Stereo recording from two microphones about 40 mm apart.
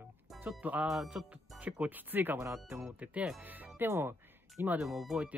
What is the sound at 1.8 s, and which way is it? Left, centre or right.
Speech, right.